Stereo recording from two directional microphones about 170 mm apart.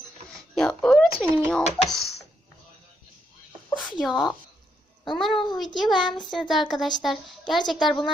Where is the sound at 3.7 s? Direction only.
Centre (ahead or behind).